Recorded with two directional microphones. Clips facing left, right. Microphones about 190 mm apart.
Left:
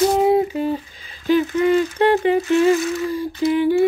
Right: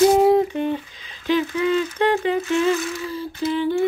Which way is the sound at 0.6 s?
40° left (ahead or behind).